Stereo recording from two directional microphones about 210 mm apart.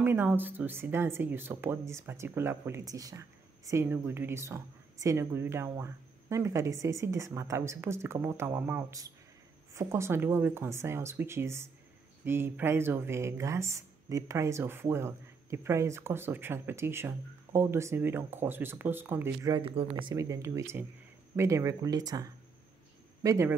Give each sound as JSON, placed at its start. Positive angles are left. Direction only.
{"t": 0.0, "sound": "speech", "side_deg": -10}